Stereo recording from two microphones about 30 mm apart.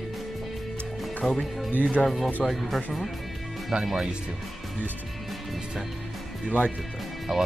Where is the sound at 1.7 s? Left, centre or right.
Right.